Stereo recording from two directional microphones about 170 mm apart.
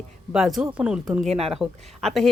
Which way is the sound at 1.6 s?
Centre (ahead or behind).